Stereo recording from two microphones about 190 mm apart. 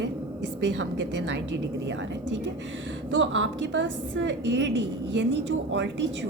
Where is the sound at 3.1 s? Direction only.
75° right (ahead or behind).